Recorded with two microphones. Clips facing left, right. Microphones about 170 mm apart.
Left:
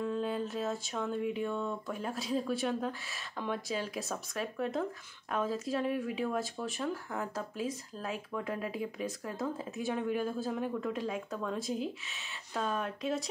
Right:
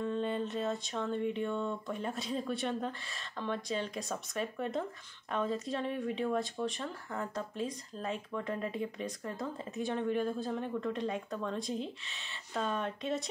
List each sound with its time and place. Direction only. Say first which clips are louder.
0.0 s speech: even; 5° left (ahead or behind)